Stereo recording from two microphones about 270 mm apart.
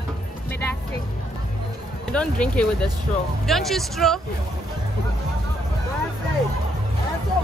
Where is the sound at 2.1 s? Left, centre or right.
Centre.